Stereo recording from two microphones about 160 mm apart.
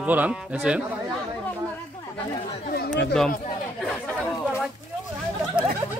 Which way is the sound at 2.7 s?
85° left.